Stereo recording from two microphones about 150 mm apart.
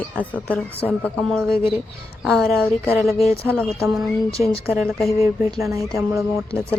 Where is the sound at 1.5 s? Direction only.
35° left (ahead or behind).